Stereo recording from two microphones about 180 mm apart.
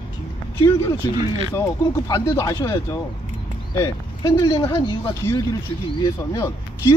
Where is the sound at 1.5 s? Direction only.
20° left (ahead or behind).